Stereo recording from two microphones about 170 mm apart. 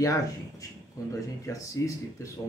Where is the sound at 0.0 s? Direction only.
20° left (ahead or behind).